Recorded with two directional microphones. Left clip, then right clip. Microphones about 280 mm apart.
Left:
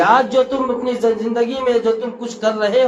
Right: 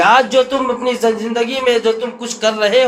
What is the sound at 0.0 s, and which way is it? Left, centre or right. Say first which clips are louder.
A man's voice: right 2 dB; right.